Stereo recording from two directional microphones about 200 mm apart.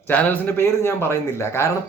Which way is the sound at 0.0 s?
10° left (ahead or behind).